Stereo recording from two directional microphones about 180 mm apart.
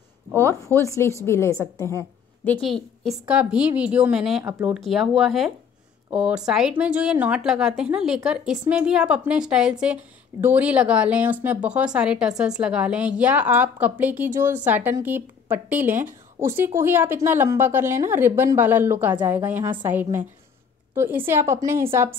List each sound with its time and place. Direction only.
0.4 s a woman's voice: 15° left (ahead or behind); by 21.8 s 15° right (ahead or behind)